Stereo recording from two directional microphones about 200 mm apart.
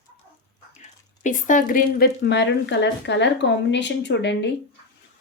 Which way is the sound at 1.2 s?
40° left (ahead or behind).